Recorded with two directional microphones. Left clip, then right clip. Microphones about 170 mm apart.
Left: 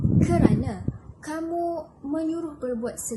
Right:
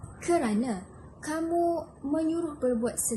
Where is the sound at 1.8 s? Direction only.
10° left (ahead or behind).